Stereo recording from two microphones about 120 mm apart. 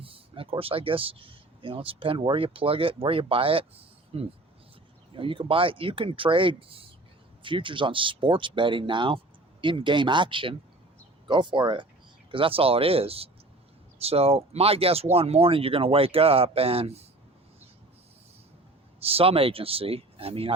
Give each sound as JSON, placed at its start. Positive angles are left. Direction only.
{"t": 0.0, "sound": "speech", "side_deg": -50}
{"t": 18.9, "sound": "speech", "side_deg": -55}